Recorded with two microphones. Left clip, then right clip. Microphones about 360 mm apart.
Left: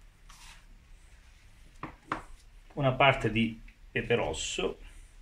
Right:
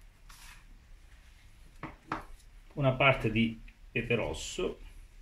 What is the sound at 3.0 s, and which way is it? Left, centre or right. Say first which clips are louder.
Speech: left 2 dB; centre.